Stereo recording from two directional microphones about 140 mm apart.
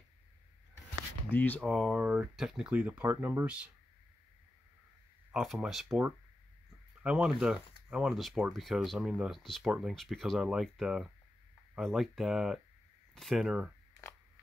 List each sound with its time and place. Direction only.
1.3 s speech: 10° left (ahead or behind)
1.6 s speech: centre (ahead or behind)
5.3 s speech: 5° right (ahead or behind)
5.9 s speech: 15° right (ahead or behind)